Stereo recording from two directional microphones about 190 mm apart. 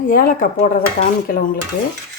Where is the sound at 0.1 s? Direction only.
45° left (ahead or behind).